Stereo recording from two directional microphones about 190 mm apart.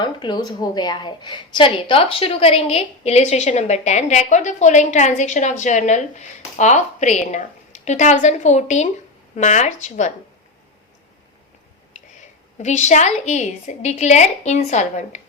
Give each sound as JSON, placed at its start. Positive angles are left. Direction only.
{"t": 0.0, "sound": "a woman's voice", "side_deg": 25}
{"t": 11.9, "sound": "a woman's voice", "side_deg": 40}